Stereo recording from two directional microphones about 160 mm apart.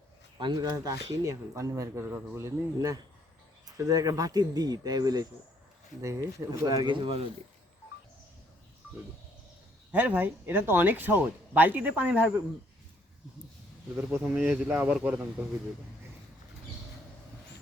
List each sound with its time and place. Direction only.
0.3 s speech: 30° right (ahead or behind)
9.9 s speech: 10° right (ahead or behind)
13.9 s speech: 10° right (ahead or behind)